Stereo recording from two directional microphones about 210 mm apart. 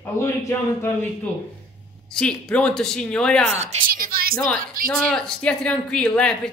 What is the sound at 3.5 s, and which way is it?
Speech, 30° right (ahead or behind).